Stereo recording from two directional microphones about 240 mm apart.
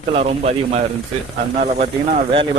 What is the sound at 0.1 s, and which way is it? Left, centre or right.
Speech, right.